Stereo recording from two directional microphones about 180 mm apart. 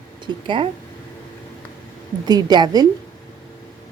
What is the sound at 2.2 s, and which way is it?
Speech, 25° right (ahead or behind).